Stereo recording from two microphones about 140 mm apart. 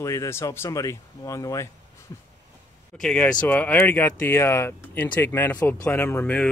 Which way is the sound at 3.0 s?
5° left (ahead or behind).